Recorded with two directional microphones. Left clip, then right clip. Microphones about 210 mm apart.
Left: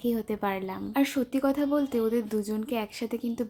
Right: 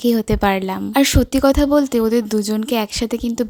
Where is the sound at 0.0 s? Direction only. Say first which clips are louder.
Right 12 dB; 45° right (ahead or behind).